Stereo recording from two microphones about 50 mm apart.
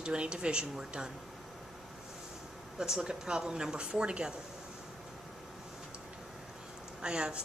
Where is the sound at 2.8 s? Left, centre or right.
Centre.